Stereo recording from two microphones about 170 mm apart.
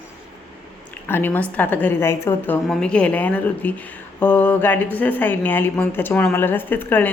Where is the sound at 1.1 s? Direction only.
10° left (ahead or behind).